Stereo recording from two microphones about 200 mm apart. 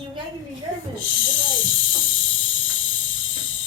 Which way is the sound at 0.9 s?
70° left (ahead or behind).